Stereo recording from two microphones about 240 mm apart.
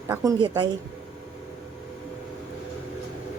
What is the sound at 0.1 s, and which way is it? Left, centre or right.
Speech, centre.